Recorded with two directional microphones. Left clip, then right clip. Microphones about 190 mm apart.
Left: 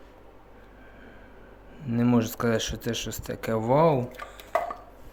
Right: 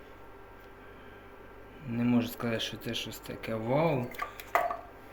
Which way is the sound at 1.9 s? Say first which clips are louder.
Left 6 dB; 40° left (ahead or behind).